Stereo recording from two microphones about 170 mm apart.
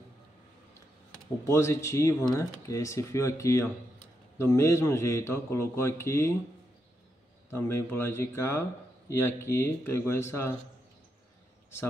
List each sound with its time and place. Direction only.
1.4 s a man's voice: 15° left (ahead or behind)
7.5 s a man's voice: 15° left (ahead or behind)